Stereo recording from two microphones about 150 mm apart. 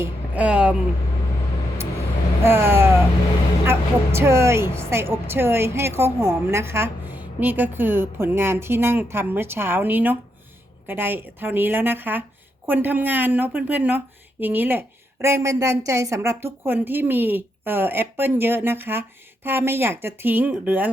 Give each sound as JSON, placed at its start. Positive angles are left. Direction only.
{"t": 0.0, "sound": "speech", "side_deg": -10}
{"t": 2.4, "sound": "vehicle", "side_deg": -15}
{"t": 3.7, "sound": "a woman's voice", "side_deg": -15}